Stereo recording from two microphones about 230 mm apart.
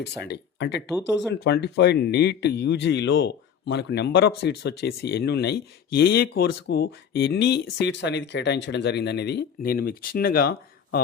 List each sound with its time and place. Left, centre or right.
0.0 s speech: left